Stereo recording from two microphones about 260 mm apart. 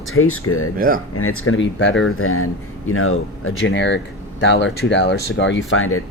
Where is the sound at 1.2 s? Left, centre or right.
Left.